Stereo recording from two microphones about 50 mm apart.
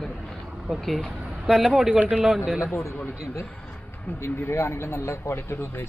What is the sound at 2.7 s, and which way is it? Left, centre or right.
Speech, left.